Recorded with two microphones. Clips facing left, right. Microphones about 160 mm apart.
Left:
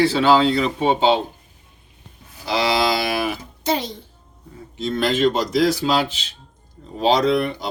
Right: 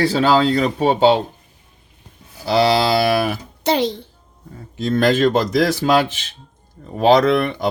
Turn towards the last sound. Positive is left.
turn(degrees=-60)  # may be behind; listen again after turning